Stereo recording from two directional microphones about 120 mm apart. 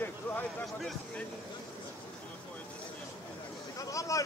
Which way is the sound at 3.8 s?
25° left (ahead or behind).